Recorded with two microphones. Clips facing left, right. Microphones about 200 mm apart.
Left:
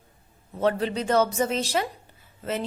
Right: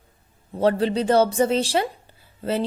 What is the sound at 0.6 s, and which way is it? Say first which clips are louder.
A woman's voice: right 4 dB; 30° right (ahead or behind).